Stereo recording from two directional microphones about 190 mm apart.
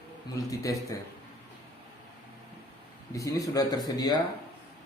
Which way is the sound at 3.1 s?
15° left (ahead or behind).